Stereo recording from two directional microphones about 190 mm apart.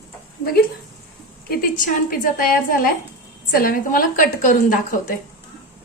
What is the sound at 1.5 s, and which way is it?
A woman's voice, 45° left (ahead or behind).